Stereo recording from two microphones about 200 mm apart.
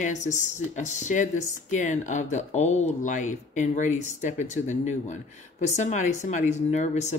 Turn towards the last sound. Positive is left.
turn(degrees=35)  # may be behind; listen again after turning